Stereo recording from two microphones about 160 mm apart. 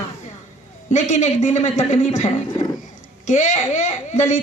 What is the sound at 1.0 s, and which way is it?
A woman's voice, 50° left (ahead or behind).